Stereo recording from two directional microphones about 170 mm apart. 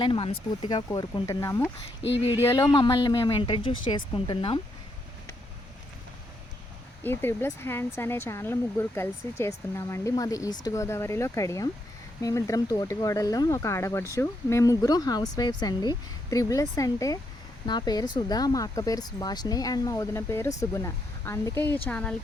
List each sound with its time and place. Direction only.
0.0 s speech: 30° left (ahead or behind)
0.9 s speech: 20° left (ahead or behind)
7.0 s speech: 15° left (ahead or behind)